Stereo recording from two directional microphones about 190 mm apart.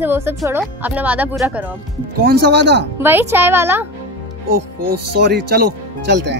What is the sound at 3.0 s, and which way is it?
Speech, 10° right (ahead or behind).